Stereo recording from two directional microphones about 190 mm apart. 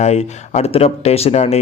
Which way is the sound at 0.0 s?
35° left (ahead or behind).